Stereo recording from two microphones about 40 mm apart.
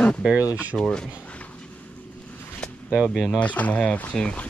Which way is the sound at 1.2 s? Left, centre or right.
Left.